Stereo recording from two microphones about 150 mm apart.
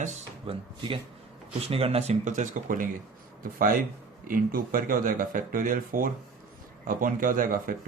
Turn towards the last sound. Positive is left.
turn(degrees=-70)  # may be behind; listen again after turning